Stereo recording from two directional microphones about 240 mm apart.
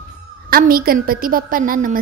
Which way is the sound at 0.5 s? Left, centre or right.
Right.